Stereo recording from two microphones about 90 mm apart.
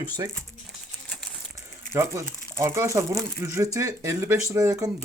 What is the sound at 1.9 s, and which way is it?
Speech, 35° right (ahead or behind).